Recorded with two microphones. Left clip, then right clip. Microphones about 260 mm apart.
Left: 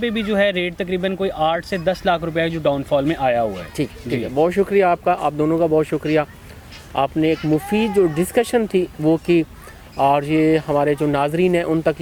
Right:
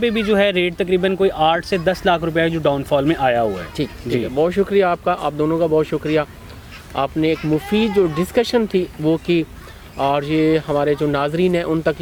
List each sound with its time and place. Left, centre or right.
0.0 s speech: centre
4.4 s speech: left